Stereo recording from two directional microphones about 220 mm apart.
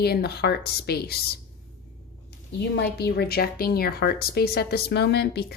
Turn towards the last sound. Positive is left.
turn(degrees=50)  # may be behind; listen again after turning